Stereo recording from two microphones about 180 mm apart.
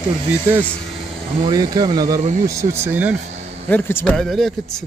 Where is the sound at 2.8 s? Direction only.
10° right (ahead or behind).